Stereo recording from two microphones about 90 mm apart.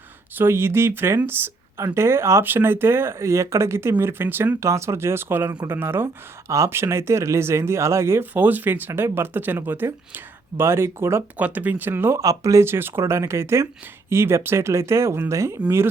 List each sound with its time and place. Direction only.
0.3 s speech: 25° right (ahead or behind)
11.3 s speech: 15° right (ahead or behind)
12.2 s speech: 40° right (ahead or behind)